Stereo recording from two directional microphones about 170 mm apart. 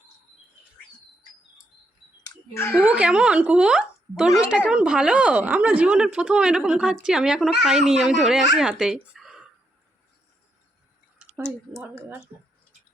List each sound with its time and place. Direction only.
2.2 s a sound: 15° left (ahead or behind)
2.7 s a woman's voice: 5° right (ahead or behind)
11.7 s speech: 10° right (ahead or behind)